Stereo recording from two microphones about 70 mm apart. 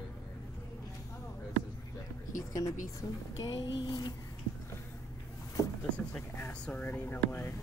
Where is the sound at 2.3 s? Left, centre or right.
Left.